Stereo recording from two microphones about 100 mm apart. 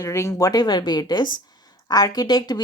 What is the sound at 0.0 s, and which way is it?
Speech, 30° left (ahead or behind).